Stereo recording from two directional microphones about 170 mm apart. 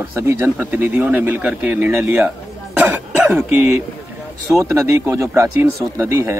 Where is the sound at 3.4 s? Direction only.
15° right (ahead or behind).